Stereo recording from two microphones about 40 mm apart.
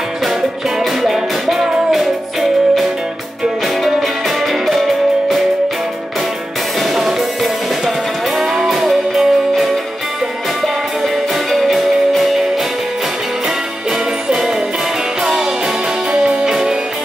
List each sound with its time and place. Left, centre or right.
1.0 s music: centre
4.6 s music: centre
8.4 s music: centre
11.5 s music: centre
16.2 s music: centre